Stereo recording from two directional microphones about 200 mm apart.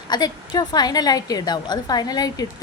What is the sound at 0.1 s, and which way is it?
A woman's voice, 20° left (ahead or behind).